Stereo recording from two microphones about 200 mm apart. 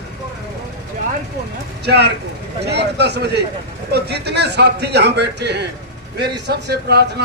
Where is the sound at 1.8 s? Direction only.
55° right (ahead or behind).